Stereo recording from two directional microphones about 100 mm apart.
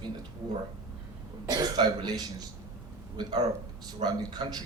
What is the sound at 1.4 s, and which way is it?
Speech, 45° right (ahead or behind).